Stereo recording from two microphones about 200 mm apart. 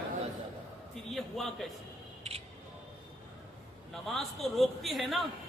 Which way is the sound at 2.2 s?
30° right (ahead or behind).